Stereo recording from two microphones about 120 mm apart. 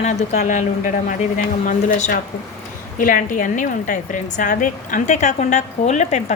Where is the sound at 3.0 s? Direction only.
90° left.